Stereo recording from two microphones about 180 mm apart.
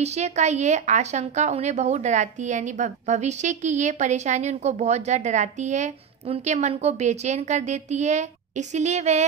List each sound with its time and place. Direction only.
0.0 s a woman's voice: 40° right (ahead or behind)